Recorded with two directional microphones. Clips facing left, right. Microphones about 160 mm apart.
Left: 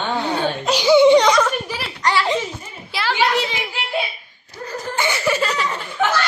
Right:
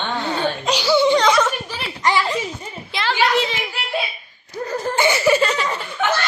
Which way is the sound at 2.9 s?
10° left (ahead or behind).